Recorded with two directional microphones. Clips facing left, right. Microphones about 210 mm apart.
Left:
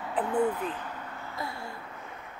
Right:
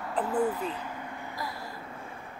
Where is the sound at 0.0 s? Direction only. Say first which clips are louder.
Left 1 dB; centre (ahead or behind).